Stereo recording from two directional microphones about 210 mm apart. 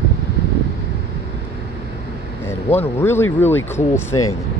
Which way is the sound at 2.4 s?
10° left (ahead or behind).